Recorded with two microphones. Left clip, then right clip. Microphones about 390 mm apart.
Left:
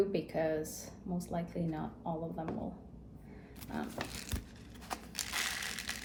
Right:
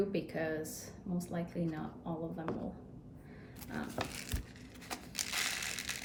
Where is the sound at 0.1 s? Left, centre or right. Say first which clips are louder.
Left 3 dB; centre.